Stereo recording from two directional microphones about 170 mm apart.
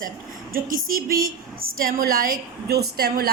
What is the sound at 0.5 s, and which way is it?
A woman's voice, 55° right (ahead or behind).